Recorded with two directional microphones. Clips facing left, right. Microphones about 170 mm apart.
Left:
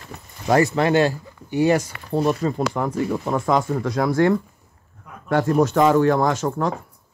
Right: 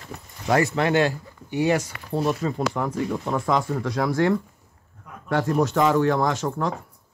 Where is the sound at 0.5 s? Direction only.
35° left (ahead or behind).